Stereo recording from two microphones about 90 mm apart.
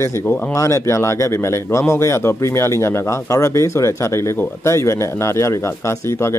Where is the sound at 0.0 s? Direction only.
30° left (ahead or behind).